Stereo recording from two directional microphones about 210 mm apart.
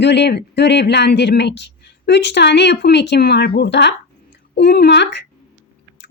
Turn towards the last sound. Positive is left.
turn(degrees=55)  # may be behind; listen again after turning